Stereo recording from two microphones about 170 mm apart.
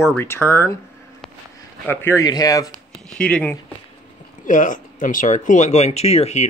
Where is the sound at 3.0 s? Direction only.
5° left (ahead or behind).